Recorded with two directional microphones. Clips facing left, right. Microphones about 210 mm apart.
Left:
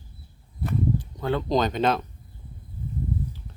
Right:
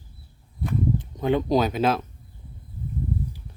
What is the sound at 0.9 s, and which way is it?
Speech, 20° right (ahead or behind).